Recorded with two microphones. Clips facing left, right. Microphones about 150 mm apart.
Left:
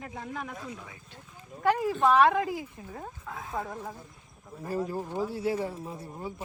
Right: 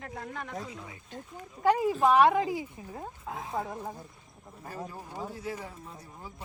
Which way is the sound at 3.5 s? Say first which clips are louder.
Even; 5° right (ahead or behind).